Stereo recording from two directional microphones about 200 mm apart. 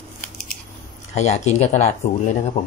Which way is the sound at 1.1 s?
35° left (ahead or behind).